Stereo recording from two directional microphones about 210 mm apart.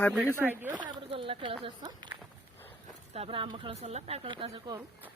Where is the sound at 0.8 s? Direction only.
25° right (ahead or behind).